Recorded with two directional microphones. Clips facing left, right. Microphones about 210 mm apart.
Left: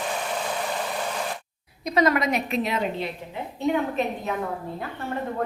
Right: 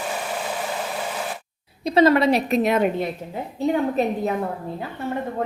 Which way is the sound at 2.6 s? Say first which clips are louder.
Right 6 dB; 55° right (ahead or behind).